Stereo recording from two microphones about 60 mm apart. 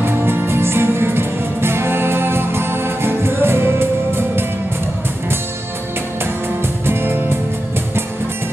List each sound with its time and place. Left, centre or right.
0.0 s music: right
6.9 s music: right